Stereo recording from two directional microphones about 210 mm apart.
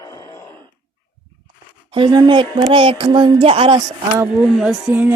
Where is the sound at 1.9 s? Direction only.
20° right (ahead or behind).